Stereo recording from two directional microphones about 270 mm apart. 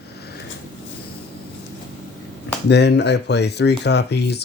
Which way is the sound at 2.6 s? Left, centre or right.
Left.